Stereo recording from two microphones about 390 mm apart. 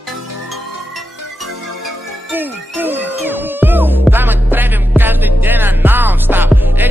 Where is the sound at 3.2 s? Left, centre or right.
Centre.